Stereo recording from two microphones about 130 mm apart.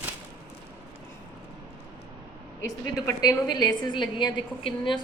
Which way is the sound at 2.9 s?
25° left (ahead or behind).